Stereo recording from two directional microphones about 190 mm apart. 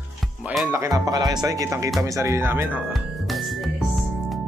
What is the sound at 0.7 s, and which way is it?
Speech, 15° right (ahead or behind).